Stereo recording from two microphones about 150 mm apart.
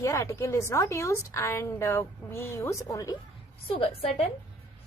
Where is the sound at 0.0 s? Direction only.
20° left (ahead or behind).